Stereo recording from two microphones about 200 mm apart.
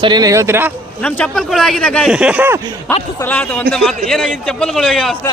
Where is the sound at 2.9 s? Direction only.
10° left (ahead or behind).